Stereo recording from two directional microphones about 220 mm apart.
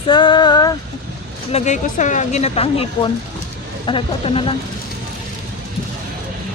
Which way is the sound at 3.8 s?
25° left (ahead or behind).